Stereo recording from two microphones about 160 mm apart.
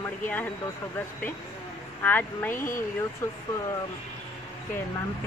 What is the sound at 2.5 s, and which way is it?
Speech, 55° left (ahead or behind).